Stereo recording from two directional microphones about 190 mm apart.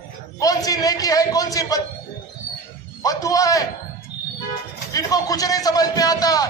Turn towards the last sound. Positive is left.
turn(degrees=20)  # may be behind; listen again after turning